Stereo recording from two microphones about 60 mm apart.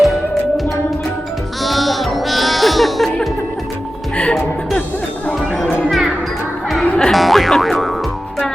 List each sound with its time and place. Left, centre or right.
0.0 s music: centre
1.6 s sheep: centre
5.8 s music: centre
6.8 s music: left
7.1 s music: centre